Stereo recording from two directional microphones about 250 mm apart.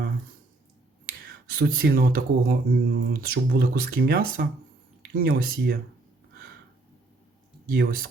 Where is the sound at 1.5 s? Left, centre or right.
Right.